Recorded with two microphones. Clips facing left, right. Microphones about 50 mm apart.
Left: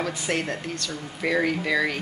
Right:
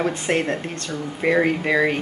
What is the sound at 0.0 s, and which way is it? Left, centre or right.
Speech, right.